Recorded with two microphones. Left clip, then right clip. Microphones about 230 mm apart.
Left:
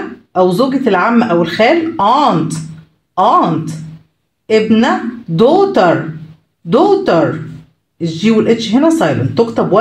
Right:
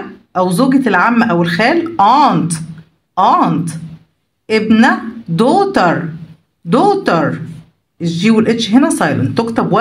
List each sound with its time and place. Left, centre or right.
0.3 s speech: right